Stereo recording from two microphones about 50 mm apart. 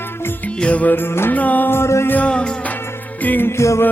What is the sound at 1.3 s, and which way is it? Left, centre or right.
Music, left.